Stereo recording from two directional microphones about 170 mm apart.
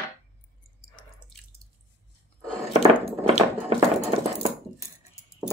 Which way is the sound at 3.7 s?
35° right (ahead or behind).